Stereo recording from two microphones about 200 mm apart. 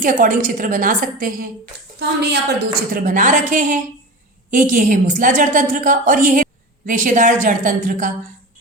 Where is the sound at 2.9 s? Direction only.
40° right (ahead or behind).